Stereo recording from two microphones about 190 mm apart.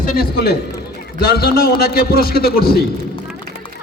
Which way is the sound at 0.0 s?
55° left (ahead or behind).